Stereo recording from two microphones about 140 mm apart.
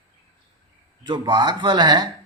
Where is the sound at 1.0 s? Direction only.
30° right (ahead or behind).